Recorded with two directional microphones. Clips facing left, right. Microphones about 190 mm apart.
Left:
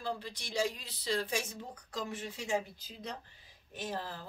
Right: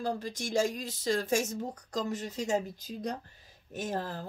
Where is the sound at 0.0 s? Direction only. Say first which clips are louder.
Right 6 dB; 45° right (ahead or behind).